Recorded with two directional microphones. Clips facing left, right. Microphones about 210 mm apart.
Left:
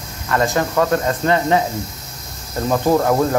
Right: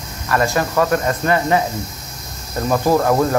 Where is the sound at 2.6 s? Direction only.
15° left (ahead or behind).